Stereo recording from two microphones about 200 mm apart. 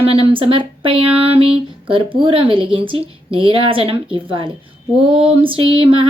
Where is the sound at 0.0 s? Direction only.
30° right (ahead or behind).